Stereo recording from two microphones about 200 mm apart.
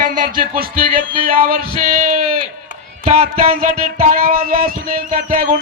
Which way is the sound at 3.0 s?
30° right (ahead or behind).